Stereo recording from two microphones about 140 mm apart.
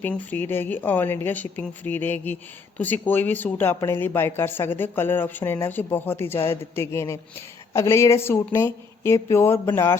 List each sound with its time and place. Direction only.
0.0 s speech: 10° left (ahead or behind)